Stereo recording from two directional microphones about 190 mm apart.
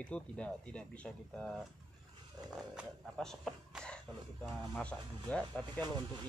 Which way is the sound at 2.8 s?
Centre (ahead or behind).